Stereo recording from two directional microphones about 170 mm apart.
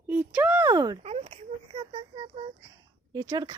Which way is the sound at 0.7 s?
25° right (ahead or behind).